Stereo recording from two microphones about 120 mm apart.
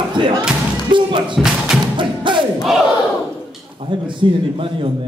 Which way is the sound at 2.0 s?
45° right (ahead or behind).